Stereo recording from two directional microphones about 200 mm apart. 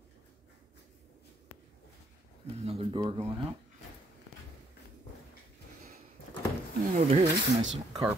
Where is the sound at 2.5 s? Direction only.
30° right (ahead or behind).